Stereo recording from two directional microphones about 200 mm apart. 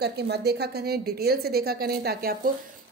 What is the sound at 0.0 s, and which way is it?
A woman's voice, 55° right (ahead or behind).